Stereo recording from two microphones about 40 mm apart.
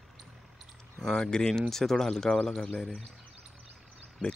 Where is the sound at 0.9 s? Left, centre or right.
Centre.